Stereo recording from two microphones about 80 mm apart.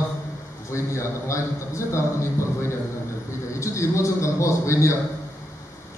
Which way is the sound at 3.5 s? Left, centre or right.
Left.